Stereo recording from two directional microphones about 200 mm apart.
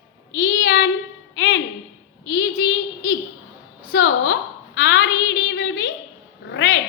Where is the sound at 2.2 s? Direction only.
70° left (ahead or behind).